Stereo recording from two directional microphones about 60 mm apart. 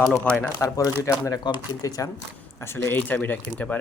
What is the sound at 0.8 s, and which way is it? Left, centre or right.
Speech, left.